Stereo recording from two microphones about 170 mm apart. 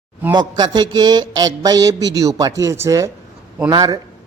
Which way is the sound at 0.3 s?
25° right (ahead or behind).